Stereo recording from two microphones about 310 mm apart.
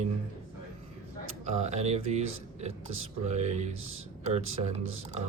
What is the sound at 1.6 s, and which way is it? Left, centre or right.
Speech, right.